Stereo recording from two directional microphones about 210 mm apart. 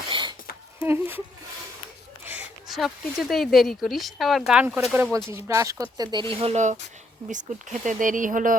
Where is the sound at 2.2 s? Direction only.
10° right (ahead or behind).